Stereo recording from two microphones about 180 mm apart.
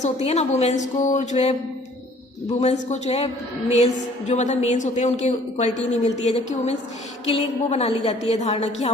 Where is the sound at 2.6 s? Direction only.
40° left (ahead or behind).